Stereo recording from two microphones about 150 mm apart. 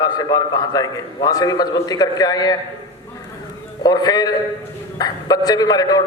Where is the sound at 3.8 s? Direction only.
25° left (ahead or behind).